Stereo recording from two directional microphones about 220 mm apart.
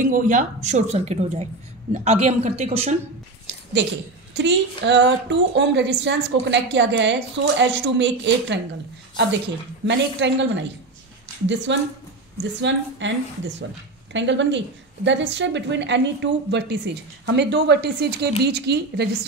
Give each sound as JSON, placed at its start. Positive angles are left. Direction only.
{"t": 0.0, "sound": "a woman's voice", "side_deg": -35}
{"t": 4.3, "sound": "a woman's voice", "side_deg": -55}
{"t": 9.8, "sound": "a woman's voice", "side_deg": -55}